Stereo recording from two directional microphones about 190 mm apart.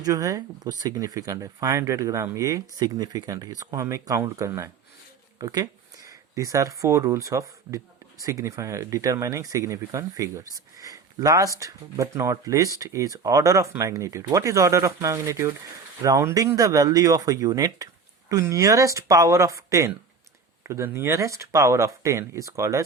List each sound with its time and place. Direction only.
0.0 s speech: 15° right (ahead or behind)